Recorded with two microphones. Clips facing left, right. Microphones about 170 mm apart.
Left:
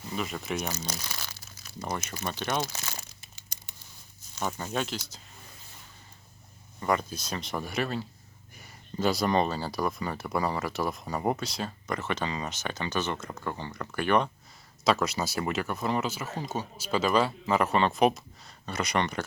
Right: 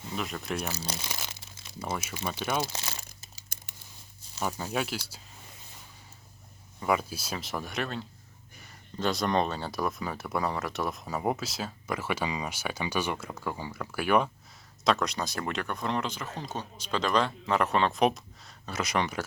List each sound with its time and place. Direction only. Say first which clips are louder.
0.1 s speech: left 1 dB; centre (ahead or behind)
0.9 s crumpling: right 1 dB; 20° right (ahead or behind)
1.8 s speech: even; 5° right (ahead or behind)
3.5 s crumpling: right 4 dB; 55° right (ahead or behind)
4.4 s speech: even; 10° right (ahead or behind)
6.7 s speech: even; 5° right (ahead or behind)